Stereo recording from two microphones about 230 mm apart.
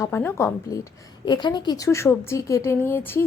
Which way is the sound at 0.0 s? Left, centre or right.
Centre.